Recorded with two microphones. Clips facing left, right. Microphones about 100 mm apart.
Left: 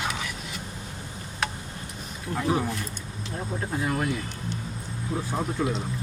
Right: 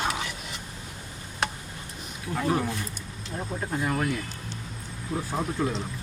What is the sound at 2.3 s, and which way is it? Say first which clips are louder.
Speech: even; 5° left (ahead or behind).